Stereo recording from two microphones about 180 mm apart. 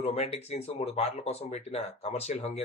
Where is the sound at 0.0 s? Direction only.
35° left (ahead or behind).